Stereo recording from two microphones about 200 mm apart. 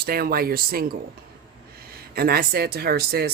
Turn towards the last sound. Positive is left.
turn(degrees=-50)  # may be behind; listen again after turning